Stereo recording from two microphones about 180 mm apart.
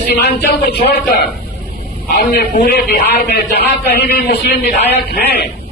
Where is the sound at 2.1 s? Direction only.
55° left (ahead or behind).